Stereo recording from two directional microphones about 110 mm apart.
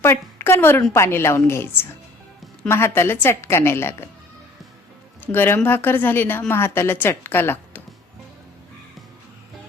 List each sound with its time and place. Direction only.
0.0 s a woman's voice: 20° left (ahead or behind)
5.2 s a woman's voice: 20° left (ahead or behind)